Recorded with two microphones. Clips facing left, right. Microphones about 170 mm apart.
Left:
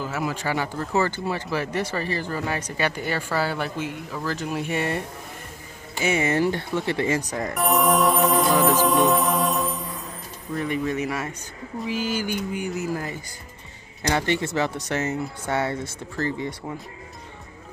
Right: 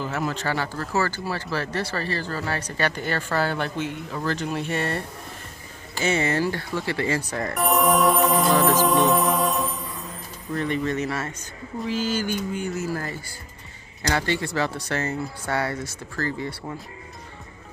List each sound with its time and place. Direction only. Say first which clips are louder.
0.0 s speech: even; 5° left (ahead or behind)
7.5 s music: even; centre (ahead or behind)
10.5 s speech: even; 10° left (ahead or behind)